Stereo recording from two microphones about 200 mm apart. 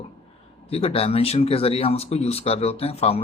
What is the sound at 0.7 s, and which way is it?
A man's voice, 30° left (ahead or behind).